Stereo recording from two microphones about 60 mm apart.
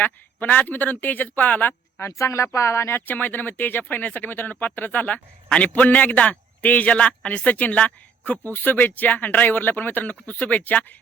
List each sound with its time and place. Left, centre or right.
0.0 s a man's voice: left
2.0 s speech: left
3.1 s a man's voice: left